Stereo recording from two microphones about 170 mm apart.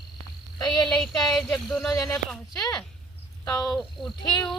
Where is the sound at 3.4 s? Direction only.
15° left (ahead or behind).